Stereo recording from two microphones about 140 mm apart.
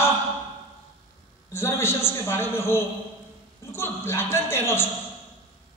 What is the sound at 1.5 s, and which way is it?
A man's voice, 20° left (ahead or behind).